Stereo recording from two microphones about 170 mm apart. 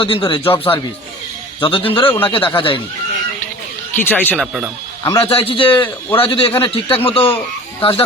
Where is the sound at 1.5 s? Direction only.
30° left (ahead or behind).